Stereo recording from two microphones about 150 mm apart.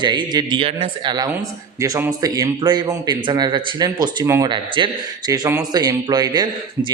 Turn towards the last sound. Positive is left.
turn(degrees=-25)  # may be behind; listen again after turning